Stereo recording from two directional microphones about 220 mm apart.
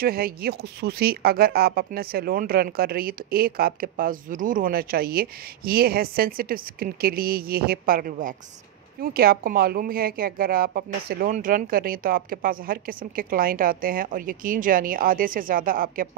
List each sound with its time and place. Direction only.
0.0 s a woman's voice: 45° right (ahead or behind)